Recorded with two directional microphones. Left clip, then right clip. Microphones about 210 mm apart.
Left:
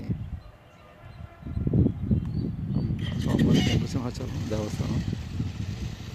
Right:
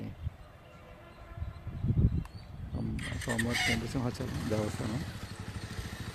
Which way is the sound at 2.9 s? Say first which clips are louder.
Left 3 dB; 20° right (ahead or behind).